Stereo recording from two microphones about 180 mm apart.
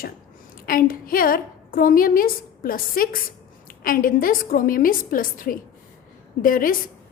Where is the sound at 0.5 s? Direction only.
55° left (ahead or behind).